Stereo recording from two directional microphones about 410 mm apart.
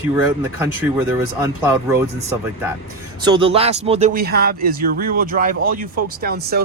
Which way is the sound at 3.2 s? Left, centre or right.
Centre.